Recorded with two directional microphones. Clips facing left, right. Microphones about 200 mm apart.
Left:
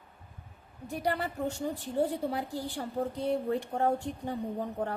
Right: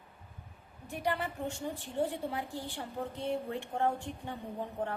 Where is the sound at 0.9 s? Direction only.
40° left (ahead or behind).